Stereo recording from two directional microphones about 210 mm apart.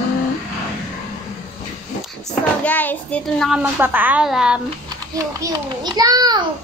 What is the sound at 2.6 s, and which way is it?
A child's voice, 5° left (ahead or behind).